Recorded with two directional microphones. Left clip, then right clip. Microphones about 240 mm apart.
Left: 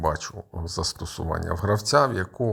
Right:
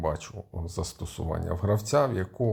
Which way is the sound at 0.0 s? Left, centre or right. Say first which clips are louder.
Left 5 dB; centre.